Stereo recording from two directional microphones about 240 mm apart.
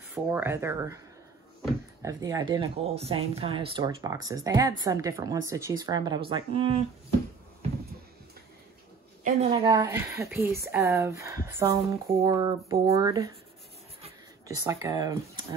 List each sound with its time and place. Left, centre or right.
0.1 s speech: centre; by 6.8 s right
9.2 s a woman's voice: right
9.8 s speech: centre
14.7 s speech: centre